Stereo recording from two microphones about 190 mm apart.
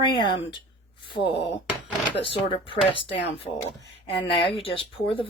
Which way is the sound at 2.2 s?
30° left (ahead or behind).